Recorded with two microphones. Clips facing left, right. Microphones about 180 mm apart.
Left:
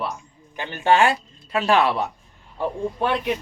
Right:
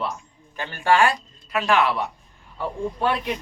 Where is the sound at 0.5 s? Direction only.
20° left (ahead or behind).